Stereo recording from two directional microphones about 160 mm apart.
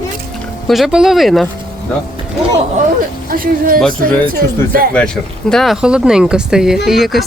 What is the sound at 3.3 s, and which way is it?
Speech, 60° right (ahead or behind).